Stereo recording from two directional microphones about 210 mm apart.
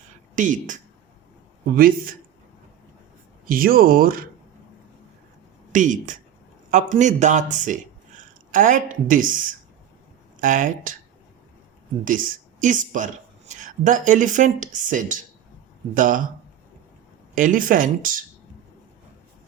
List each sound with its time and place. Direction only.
0.3 s speech: 35° right (ahead or behind)
3.4 s speech: 45° right (ahead or behind)
5.7 s speech: 35° right (ahead or behind)
12.0 s speech: 40° right (ahead or behind)
17.3 s speech: 40° right (ahead or behind)